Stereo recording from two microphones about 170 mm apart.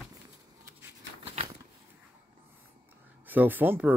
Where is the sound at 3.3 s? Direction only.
10° right (ahead or behind).